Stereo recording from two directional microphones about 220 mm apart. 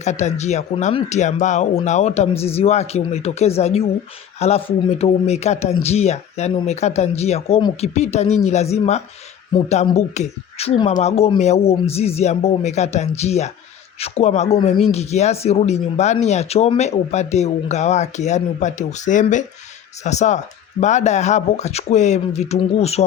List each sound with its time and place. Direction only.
0.0 s speech: 30° left (ahead or behind)